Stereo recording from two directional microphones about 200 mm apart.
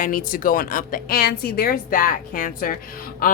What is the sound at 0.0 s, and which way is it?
A woman's voice, 45° left (ahead or behind).